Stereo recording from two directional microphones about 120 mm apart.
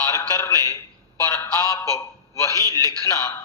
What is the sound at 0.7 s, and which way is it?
A man's voice, 15° left (ahead or behind).